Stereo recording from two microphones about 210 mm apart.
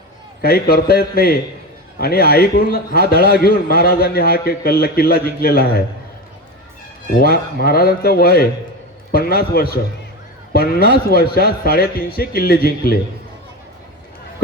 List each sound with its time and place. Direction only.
0.4 s a man's voice: 45° left (ahead or behind)
7.2 s a man's voice: 45° left (ahead or behind)